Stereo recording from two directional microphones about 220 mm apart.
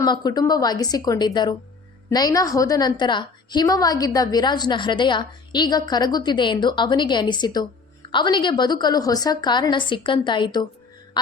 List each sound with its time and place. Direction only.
0.0 s a woman's voice: 20° left (ahead or behind)